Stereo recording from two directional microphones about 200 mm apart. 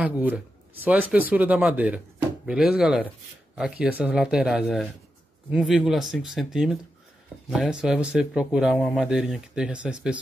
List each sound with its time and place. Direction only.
0.0 s speech: 5° right (ahead or behind)